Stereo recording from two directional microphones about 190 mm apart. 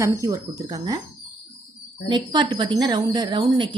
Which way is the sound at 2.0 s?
25° right (ahead or behind).